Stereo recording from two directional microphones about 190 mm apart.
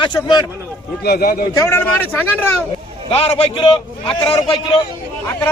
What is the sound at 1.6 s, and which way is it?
Speech, 15° left (ahead or behind).